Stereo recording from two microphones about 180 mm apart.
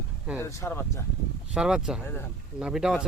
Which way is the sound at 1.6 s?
5° right (ahead or behind).